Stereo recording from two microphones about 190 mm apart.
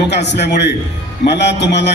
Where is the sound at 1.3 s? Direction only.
65° left (ahead or behind).